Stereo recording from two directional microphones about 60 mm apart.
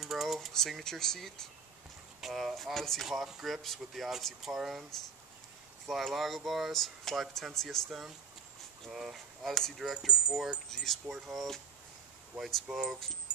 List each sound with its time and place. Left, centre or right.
0.0 s a sound: centre
0.5 s speech: centre
3.1 s speech: centre
5.9 s speech: centre
12.7 s speech: centre